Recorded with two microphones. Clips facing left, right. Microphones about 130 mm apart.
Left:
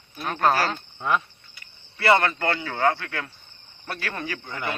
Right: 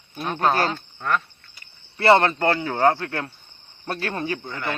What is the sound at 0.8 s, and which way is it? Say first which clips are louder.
Speech: even; 10° left (ahead or behind).